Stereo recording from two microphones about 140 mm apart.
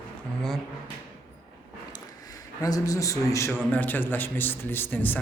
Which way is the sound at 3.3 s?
20° left (ahead or behind).